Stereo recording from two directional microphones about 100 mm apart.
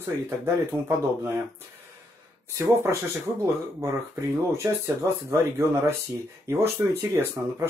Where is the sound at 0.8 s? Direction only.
25° right (ahead or behind).